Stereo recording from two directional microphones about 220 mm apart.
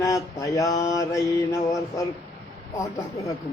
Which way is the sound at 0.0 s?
15° left (ahead or behind).